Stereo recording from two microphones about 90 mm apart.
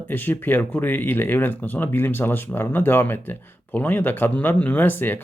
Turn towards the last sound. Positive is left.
turn(degrees=20)  # may be behind; listen again after turning